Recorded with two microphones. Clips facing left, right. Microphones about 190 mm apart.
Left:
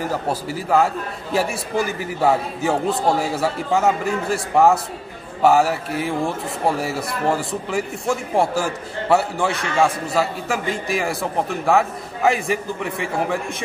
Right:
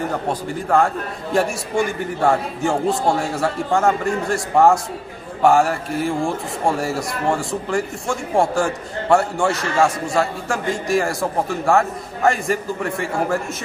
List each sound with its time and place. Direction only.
0.1 s speech: 5° left (ahead or behind)